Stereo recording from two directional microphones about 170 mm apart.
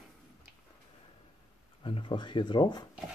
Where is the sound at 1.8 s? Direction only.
30° left (ahead or behind).